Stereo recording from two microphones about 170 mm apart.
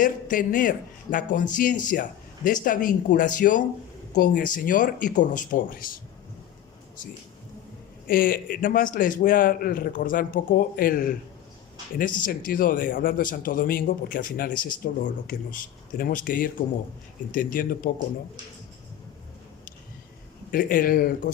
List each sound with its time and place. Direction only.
0.0 s a man's voice: 50° left (ahead or behind)
8.0 s a man's voice: 55° left (ahead or behind)
12.2 s a man's voice: 55° left (ahead or behind)
16.0 s a man's voice: 55° left (ahead or behind)
20.5 s a man's voice: 55° left (ahead or behind)